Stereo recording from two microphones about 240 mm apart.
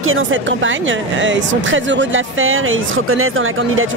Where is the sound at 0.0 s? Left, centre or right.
Right.